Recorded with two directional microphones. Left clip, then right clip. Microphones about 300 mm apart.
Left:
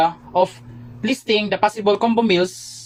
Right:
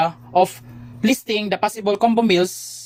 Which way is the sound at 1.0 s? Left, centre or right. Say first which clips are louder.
Left 1 dB; right.